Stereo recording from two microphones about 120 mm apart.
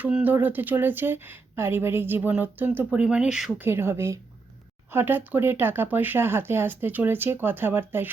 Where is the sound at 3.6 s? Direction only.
20° right (ahead or behind).